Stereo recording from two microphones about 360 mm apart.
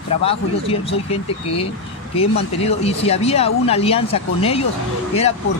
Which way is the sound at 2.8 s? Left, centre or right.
Centre.